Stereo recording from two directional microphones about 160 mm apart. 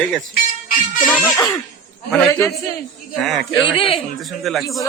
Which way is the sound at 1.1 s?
10° left (ahead or behind).